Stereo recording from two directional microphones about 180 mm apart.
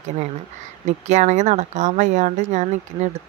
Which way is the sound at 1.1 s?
40° right (ahead or behind).